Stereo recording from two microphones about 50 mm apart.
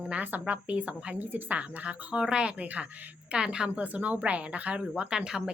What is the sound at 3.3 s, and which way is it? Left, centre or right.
Speech, centre.